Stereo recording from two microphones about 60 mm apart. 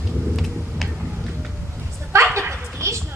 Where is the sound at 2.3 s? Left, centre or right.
Right.